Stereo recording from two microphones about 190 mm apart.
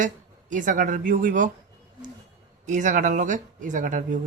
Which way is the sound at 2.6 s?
40° right (ahead or behind).